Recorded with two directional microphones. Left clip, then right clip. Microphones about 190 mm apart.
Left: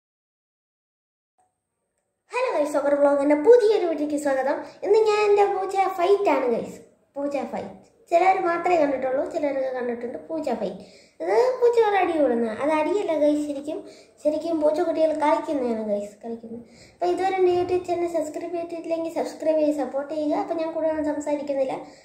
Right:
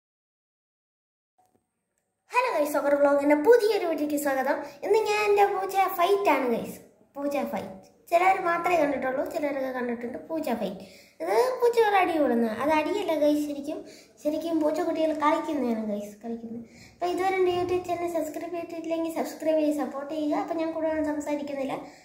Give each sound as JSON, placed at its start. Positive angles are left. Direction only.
{"t": 2.2, "sound": "a woman's voice", "side_deg": 5}